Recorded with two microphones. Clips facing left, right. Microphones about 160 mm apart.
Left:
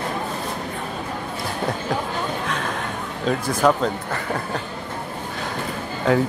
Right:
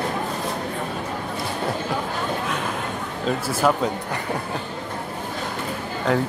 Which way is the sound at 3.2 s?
5° right (ahead or behind).